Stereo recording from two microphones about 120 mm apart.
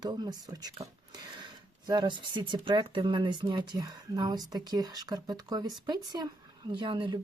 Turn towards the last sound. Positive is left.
turn(degrees=-45)  # may be behind; listen again after turning